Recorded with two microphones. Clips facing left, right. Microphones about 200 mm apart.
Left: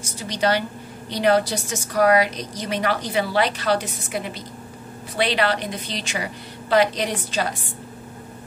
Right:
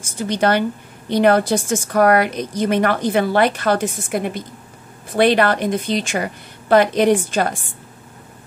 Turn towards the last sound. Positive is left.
turn(degrees=-50)  # may be behind; listen again after turning